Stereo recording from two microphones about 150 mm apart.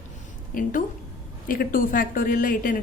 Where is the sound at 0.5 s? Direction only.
65° left (ahead or behind).